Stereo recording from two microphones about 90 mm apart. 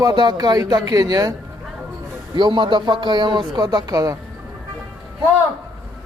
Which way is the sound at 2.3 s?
60° right (ahead or behind).